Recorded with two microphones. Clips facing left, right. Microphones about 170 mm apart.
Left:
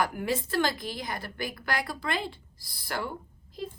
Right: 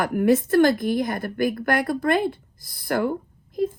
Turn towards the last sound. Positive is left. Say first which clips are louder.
# right 13 dB
turn(degrees=-55)  # may be behind; listen again after turning